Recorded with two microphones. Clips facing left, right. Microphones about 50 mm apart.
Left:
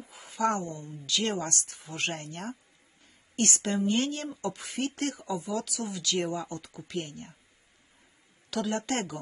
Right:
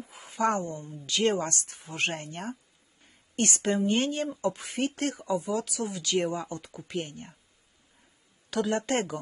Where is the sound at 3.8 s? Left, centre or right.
Right.